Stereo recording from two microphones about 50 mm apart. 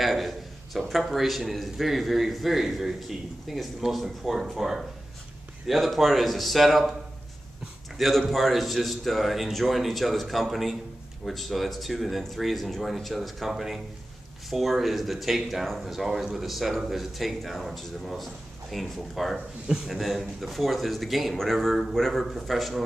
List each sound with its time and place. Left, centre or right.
0.0 s a sound: centre
0.7 s a man's voice: centre
8.0 s a man's voice: centre
19.3 s speech: centre
19.9 s a man's voice: centre